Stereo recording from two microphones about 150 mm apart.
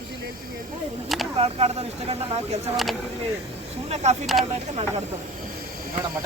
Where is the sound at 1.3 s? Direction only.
45° right (ahead or behind).